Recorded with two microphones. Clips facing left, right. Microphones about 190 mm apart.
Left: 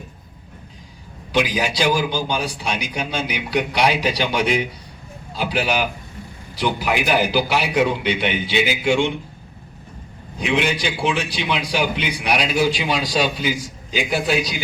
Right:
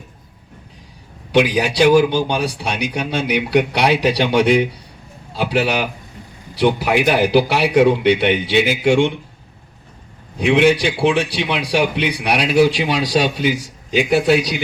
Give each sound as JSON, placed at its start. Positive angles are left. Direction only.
{"t": 1.3, "sound": "a man's voice", "side_deg": -65}
{"t": 10.3, "sound": "a man's voice", "side_deg": -65}